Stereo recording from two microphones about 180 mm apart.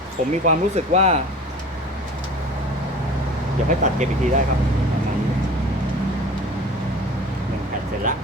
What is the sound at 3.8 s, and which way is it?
Speech, 45° right (ahead or behind).